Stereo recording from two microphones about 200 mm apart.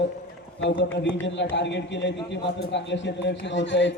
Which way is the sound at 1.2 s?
65° left (ahead or behind).